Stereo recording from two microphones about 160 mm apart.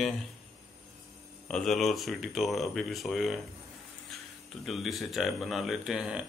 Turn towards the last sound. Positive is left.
turn(degrees=-5)  # may be behind; listen again after turning